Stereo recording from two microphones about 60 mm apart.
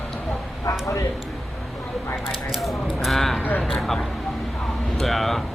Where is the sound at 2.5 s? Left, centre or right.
Centre.